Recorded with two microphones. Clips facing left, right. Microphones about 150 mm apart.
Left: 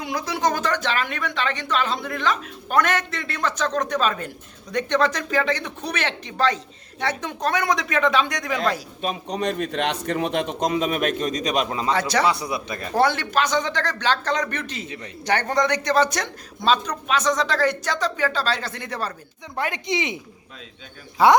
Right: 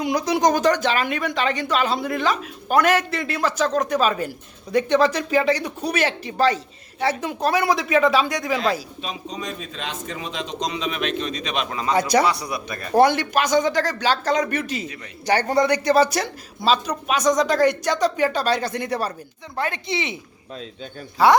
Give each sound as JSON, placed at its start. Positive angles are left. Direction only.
{"t": 0.0, "sound": "a man's voice", "side_deg": -15}
{"t": 9.0, "sound": "a man's voice", "side_deg": 60}
{"t": 11.9, "sound": "a man's voice", "side_deg": -10}
{"t": 12.2, "sound": "speech", "side_deg": 25}
{"t": 12.9, "sound": "a man's voice", "side_deg": -15}
{"t": 19.5, "sound": "speech", "side_deg": 15}
{"t": 21.2, "sound": "speech", "side_deg": 20}